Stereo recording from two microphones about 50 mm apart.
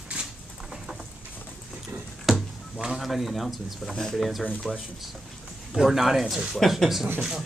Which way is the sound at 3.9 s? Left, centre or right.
Centre.